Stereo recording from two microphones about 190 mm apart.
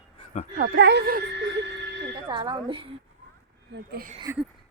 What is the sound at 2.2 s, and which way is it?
Speech, 25° right (ahead or behind).